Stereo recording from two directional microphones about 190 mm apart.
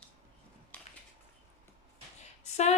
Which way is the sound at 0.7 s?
5° left (ahead or behind).